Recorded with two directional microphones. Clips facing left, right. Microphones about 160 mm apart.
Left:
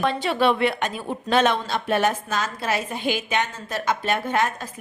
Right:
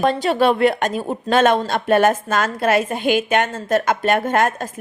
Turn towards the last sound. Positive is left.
turn(degrees=-50)  # may be behind; listen again after turning